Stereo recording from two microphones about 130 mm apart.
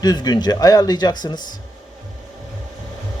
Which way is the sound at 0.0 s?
30° left (ahead or behind).